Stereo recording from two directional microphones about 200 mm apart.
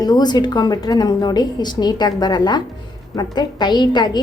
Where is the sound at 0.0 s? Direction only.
20° left (ahead or behind).